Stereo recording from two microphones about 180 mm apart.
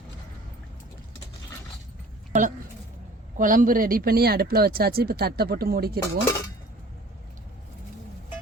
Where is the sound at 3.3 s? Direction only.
45° right (ahead or behind).